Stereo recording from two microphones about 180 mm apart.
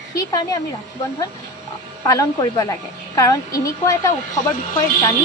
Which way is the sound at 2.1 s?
20° left (ahead or behind).